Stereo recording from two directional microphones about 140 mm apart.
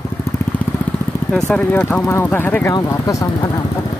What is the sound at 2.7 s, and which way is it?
Speech, 25° left (ahead or behind).